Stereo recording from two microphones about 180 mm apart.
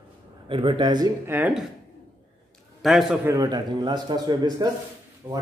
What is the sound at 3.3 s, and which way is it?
Speech, 20° right (ahead or behind).